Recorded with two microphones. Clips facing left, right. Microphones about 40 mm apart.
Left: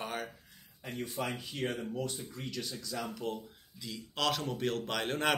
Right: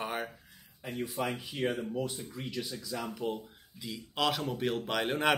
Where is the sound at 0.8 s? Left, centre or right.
Centre.